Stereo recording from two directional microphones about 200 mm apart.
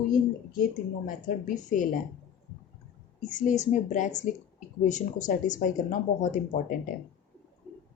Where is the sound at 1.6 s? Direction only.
40° left (ahead or behind).